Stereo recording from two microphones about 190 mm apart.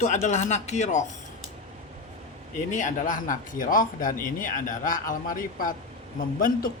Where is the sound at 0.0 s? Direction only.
40° left (ahead or behind).